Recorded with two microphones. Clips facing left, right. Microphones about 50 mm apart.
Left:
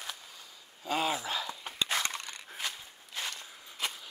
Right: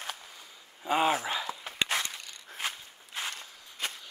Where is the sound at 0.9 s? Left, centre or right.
Right.